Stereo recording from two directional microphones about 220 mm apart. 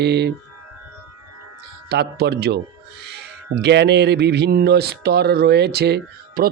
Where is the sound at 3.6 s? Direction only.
50° right (ahead or behind).